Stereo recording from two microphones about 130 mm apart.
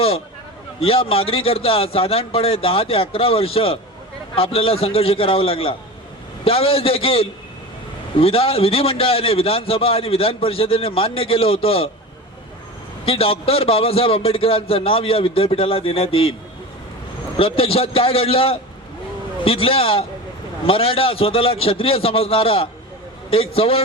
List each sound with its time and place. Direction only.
0.8 s a man's voice: 45° left (ahead or behind)
13.1 s a man's voice: 45° left (ahead or behind)
17.3 s a man's voice: 45° left (ahead or behind)